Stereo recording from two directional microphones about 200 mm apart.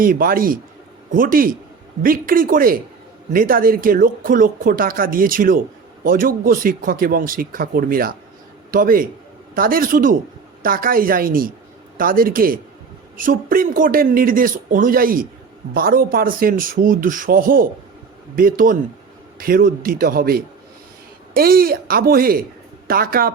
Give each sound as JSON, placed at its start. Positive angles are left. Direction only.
{"t": 0.0, "sound": "speech", "side_deg": -45}